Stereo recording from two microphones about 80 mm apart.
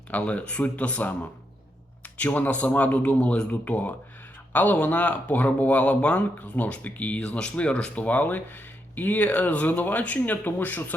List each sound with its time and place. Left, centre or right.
0.1 s speech: centre
2.1 s speech: left